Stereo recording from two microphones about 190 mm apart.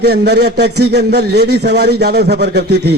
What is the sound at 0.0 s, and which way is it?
A man's voice, 60° right (ahead or behind).